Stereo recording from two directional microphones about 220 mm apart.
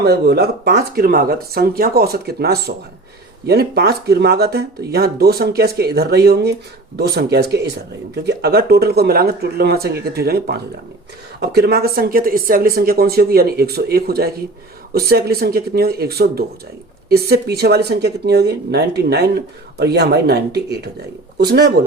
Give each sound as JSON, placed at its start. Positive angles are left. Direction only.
{"t": 0.0, "sound": "speech", "side_deg": -45}